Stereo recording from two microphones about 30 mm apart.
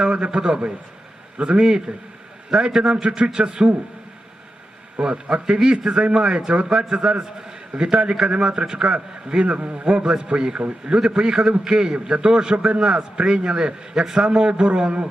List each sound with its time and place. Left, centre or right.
0.0 s a man's voice: right
4.9 s a man's voice: right
6.7 s a man's voice: right
9.5 s a man's voice: right
9.8 s a man's voice: right
14.3 s a man's voice: right